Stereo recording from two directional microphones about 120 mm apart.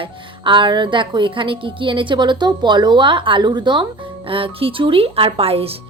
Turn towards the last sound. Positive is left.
turn(degrees=-55)  # may be behind; listen again after turning